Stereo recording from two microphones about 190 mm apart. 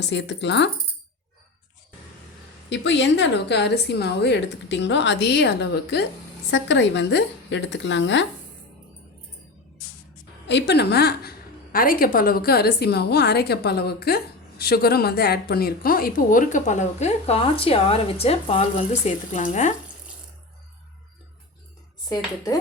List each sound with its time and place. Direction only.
0.0 s speech: 65° left (ahead or behind)
2.6 s a woman's voice: 70° left (ahead or behind)
10.4 s a woman's voice: 65° left (ahead or behind); by 19.7 s 40° left (ahead or behind)